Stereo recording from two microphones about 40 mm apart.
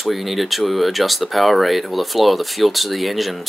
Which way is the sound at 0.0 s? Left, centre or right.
Centre.